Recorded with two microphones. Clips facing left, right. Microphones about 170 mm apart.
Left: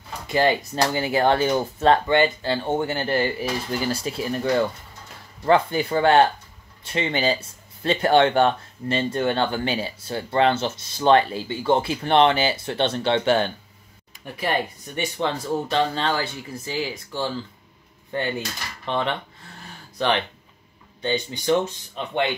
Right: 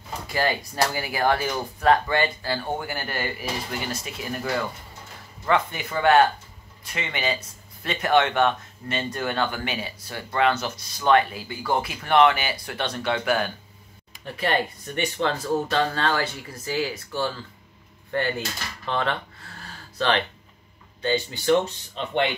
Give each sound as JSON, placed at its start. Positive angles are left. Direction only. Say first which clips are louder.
{"t": 0.3, "sound": "speech", "louder": "left 5 dB", "side_deg": 25}
{"t": 14.2, "sound": "speech", "louder": "even", "side_deg": 10}
{"t": 18.9, "sound": "a sound", "louder": "left 1 dB", "side_deg": 20}
{"t": 21.0, "sound": "speech", "louder": "even", "side_deg": 20}